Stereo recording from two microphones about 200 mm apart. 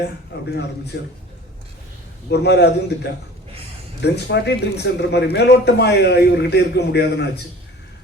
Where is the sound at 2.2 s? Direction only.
55° left (ahead or behind).